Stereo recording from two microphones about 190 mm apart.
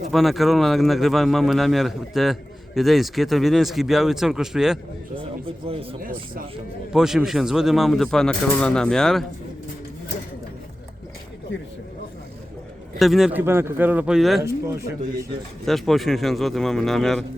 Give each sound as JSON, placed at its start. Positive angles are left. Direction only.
{"t": 0.1, "sound": "speech", "side_deg": 0}
{"t": 5.6, "sound": "speech", "side_deg": -30}
{"t": 6.0, "sound": "speech", "side_deg": -50}
{"t": 6.9, "sound": "speech", "side_deg": -5}
{"t": 13.0, "sound": "speech", "side_deg": 0}
{"t": 14.4, "sound": "speech", "side_deg": -15}
{"t": 15.6, "sound": "speech", "side_deg": 0}